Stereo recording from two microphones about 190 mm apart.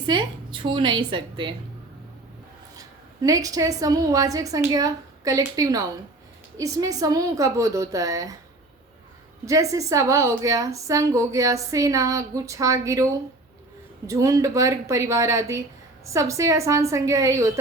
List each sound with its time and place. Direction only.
0.0 s a woman's voice: 25° right (ahead or behind)
2.7 s a woman's voice: 20° right (ahead or behind)
9.5 s a woman's voice: 15° right (ahead or behind)
14.1 s a woman's voice: 15° right (ahead or behind)